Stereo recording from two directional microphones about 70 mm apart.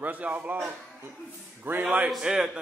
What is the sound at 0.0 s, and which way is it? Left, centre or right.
Speech, right.